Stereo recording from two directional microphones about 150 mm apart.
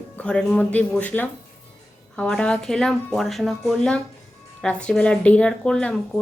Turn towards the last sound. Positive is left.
turn(degrees=5)  # may be behind; listen again after turning